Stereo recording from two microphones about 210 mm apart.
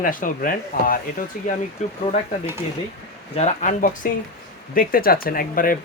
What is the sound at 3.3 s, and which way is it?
Speech, 35° left (ahead or behind).